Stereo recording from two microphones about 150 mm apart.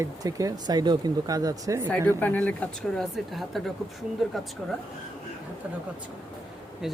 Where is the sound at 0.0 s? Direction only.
25° right (ahead or behind).